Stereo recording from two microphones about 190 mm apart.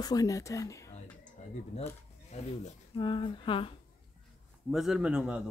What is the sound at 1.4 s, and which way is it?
Bird, 35° left (ahead or behind).